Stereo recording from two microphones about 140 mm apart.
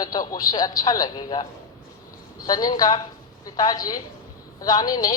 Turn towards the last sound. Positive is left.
turn(degrees=25)  # may be behind; listen again after turning